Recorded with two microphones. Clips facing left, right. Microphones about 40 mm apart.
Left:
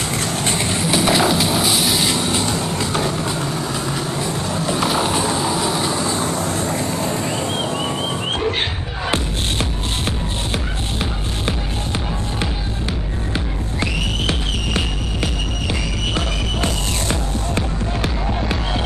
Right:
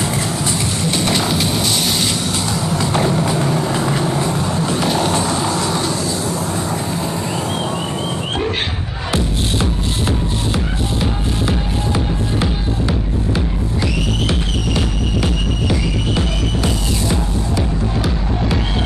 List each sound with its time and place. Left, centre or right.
0.8 s a sound: centre
2.4 s music: left
2.8 s music: right
3.5 s vehicle: right
3.8 s music: right
4.7 s a sound: centre
5.5 s vehicle: centre
5.9 s vehicle: left
9.1 s music: left
16.6 s music: left